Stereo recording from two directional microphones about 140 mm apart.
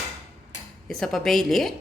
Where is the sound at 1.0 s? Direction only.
5° left (ahead or behind).